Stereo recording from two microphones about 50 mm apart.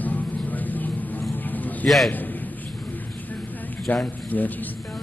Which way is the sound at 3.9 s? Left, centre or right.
Left.